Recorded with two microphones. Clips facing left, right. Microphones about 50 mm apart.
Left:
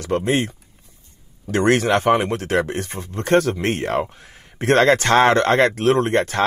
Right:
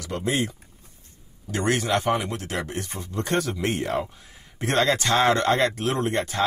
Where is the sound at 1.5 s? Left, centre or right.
Left.